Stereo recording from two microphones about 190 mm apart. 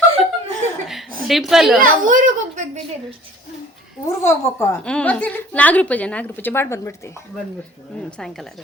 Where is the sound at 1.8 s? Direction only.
45° right (ahead or behind).